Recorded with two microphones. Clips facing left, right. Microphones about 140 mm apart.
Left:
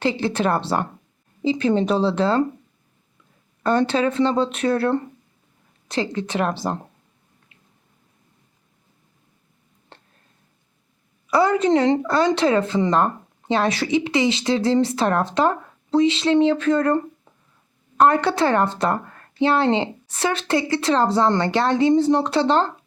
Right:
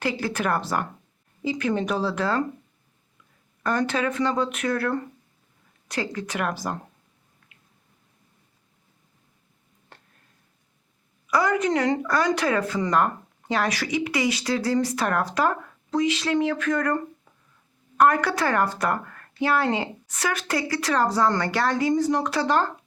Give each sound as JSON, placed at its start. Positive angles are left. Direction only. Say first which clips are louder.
{"t": 0.0, "sound": "a woman's voice", "louder": "left 5 dB", "side_deg": 25}
{"t": 3.6, "sound": "a woman's voice", "louder": "left 5 dB", "side_deg": 30}
{"t": 9.9, "sound": "a sound", "louder": "left 4 dB", "side_deg": 30}
{"t": 11.3, "sound": "a woman's voice", "louder": "left 5 dB", "side_deg": 30}